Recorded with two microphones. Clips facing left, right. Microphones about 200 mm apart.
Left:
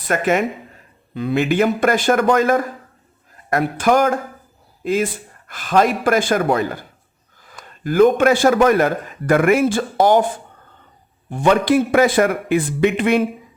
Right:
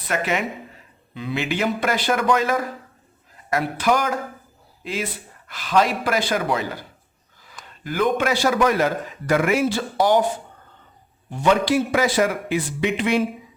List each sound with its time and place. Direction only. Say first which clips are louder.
0.1 s a man's voice: left 6 dB; 50° left (ahead or behind)
11.3 s a man's voice: left 4 dB; 55° left (ahead or behind)